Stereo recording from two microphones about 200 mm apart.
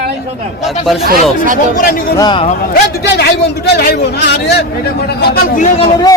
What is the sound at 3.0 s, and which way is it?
A man's voice, 55° left (ahead or behind).